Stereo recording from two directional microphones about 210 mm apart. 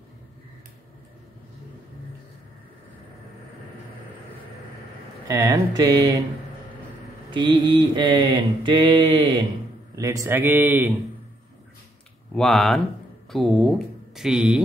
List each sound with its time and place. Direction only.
5.3 s speech: 15° right (ahead or behind)
7.2 s mantra: 20° right (ahead or behind)
9.9 s speech: 15° right (ahead or behind)
12.4 s speech: centre (ahead or behind)